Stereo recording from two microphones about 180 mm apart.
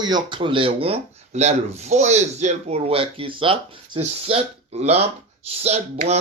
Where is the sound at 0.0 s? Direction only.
25° right (ahead or behind).